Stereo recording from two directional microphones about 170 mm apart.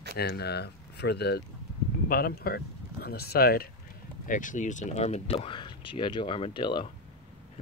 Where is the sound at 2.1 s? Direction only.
60° left (ahead or behind).